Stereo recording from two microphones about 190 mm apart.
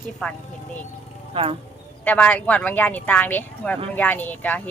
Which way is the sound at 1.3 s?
30° right (ahead or behind).